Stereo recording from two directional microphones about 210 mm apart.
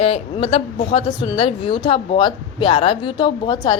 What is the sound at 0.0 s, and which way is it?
A man's voice, 30° left (ahead or behind).